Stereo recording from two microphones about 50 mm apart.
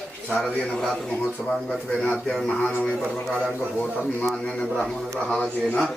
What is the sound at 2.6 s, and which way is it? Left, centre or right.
Speech, left.